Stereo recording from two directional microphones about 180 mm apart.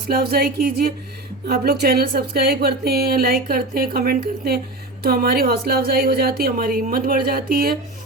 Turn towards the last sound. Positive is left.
turn(degrees=-55)  # may be behind; listen again after turning